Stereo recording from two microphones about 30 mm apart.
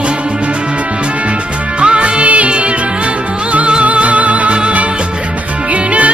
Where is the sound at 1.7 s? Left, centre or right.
Right.